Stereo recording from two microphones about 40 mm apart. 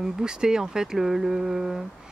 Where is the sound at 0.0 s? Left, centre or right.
Centre.